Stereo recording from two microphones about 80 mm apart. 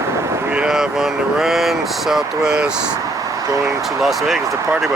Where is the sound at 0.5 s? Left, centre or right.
Centre.